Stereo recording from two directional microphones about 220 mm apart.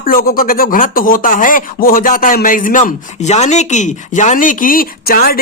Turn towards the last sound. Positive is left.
turn(degrees=45)  # may be behind; listen again after turning